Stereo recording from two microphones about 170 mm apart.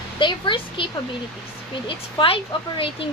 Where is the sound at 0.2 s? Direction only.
30° left (ahead or behind).